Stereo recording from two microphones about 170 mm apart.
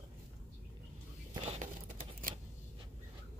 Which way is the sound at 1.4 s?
40° right (ahead or behind).